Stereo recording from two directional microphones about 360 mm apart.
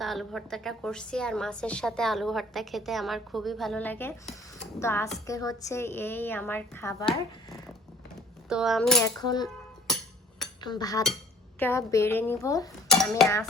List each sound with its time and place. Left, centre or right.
0.0 s a woman's voice: centre
10.6 s a woman's voice: centre